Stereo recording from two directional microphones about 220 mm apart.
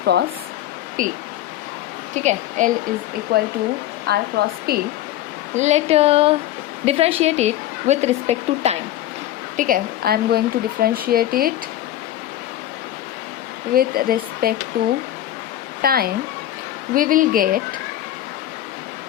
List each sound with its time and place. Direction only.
0.0 s speech: 50° right (ahead or behind)
1.0 s a woman's voice: 40° right (ahead or behind)
2.1 s a woman's voice: 35° right (ahead or behind)
3.3 s speech: 45° right (ahead or behind)
5.5 s a woman's voice: 30° right (ahead or behind)
9.6 s speech: 40° right (ahead or behind)
13.7 s speech: 40° right (ahead or behind)
15.8 s a woman's voice: 45° right (ahead or behind)